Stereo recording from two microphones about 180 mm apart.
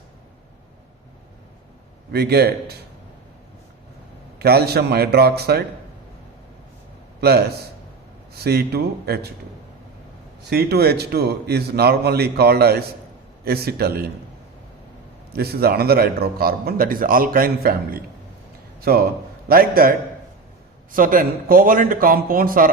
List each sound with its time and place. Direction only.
2.1 s a man's voice: 60° right (ahead or behind)
4.4 s a man's voice: 60° right (ahead or behind)
7.2 s a man's voice: 60° right (ahead or behind)
10.5 s a man's voice: 60° right (ahead or behind)
15.3 s a man's voice: 60° right (ahead or behind)